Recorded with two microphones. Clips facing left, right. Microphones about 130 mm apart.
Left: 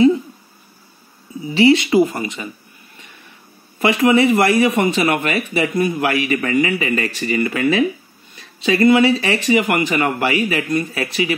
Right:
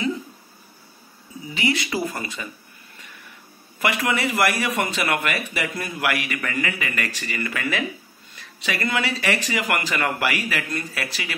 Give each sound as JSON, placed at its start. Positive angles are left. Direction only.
{"t": 1.5, "sound": "a man's voice", "side_deg": 30}
{"t": 3.8, "sound": "a man's voice", "side_deg": 25}